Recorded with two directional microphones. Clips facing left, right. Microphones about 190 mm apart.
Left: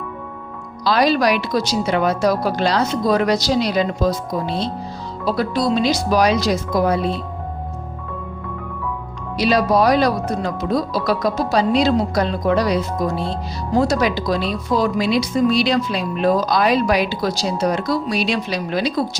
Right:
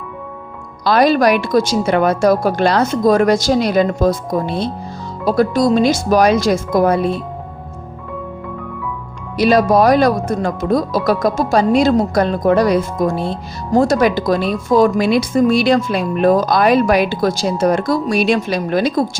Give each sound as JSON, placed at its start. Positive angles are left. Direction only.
{"t": 0.9, "sound": "speech", "side_deg": -50}
{"t": 9.4, "sound": "speech", "side_deg": -50}